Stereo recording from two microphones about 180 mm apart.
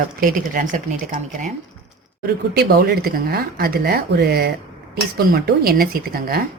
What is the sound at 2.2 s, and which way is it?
Speech, 60° right (ahead or behind).